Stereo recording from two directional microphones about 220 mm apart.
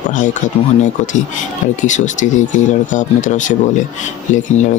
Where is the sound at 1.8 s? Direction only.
35° left (ahead or behind).